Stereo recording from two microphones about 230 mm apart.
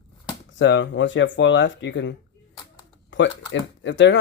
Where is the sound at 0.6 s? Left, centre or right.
Left.